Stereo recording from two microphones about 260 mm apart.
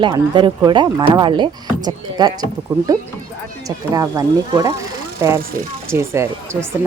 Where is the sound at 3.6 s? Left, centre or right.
Centre.